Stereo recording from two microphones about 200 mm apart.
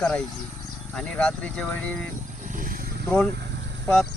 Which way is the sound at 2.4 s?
40° right (ahead or behind).